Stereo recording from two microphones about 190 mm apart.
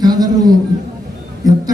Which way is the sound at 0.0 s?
20° right (ahead or behind).